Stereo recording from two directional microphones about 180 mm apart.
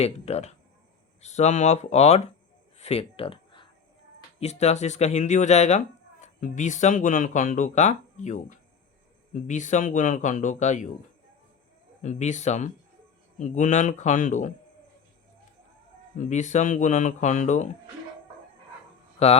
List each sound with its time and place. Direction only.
0.0 s speech: 35° left (ahead or behind)
2.7 s a sound: 35° left (ahead or behind)
4.4 s a man's voice: 35° left (ahead or behind)
12.0 s a man's voice: 40° left (ahead or behind)
16.1 s speech: 40° left (ahead or behind)
19.2 s speech: 35° left (ahead or behind)